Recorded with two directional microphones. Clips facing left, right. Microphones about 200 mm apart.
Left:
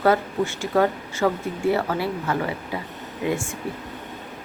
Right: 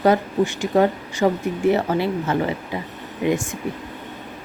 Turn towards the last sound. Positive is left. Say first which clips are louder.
# right 4 dB
turn(degrees=-20)  # may be behind; listen again after turning